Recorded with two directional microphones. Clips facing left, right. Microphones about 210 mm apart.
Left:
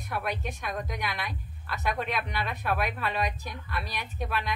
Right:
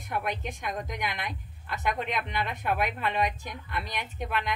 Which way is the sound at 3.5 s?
20° right (ahead or behind).